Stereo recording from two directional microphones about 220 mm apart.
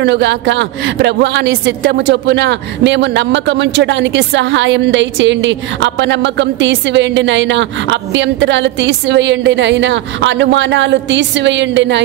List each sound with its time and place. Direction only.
0.0 s a woman's voice: 55° right (ahead or behind)